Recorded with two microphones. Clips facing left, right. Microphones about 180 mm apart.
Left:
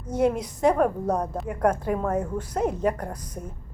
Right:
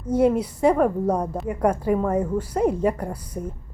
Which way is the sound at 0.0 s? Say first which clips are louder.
Right 4 dB; 10° right (ahead or behind).